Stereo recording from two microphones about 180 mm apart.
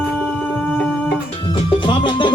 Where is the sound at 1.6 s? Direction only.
25° left (ahead or behind).